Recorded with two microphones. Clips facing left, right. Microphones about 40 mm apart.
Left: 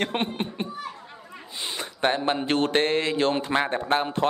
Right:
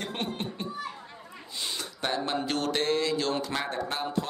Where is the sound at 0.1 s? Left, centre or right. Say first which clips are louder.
Left 5 dB; left.